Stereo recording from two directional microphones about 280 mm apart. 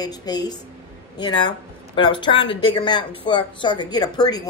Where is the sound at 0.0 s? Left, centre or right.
Centre.